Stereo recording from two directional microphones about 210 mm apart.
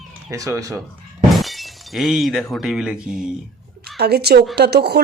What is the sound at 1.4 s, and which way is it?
Speech, centre (ahead or behind).